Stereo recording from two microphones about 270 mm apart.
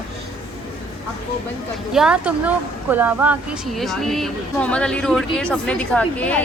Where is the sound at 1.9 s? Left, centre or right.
Centre.